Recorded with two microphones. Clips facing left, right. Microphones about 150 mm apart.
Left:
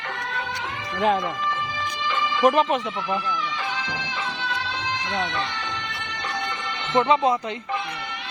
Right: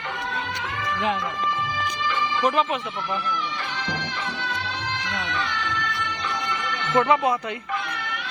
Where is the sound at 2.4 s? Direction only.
40° left (ahead or behind).